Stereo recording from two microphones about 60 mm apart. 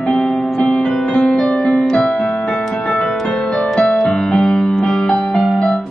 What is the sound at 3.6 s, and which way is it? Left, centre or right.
Music, centre.